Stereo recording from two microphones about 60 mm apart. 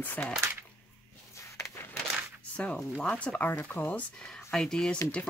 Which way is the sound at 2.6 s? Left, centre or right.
Centre.